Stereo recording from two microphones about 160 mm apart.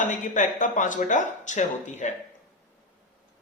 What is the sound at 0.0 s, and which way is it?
Speech, 50° left (ahead or behind).